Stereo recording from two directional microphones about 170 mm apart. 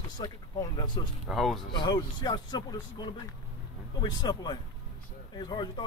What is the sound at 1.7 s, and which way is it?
Speech, 25° left (ahead or behind).